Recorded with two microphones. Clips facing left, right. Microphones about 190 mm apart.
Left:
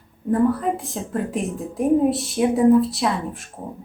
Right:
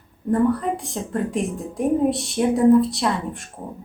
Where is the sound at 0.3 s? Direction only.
Centre (ahead or behind).